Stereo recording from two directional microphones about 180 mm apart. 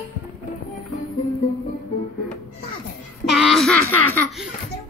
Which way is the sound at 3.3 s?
Centre (ahead or behind).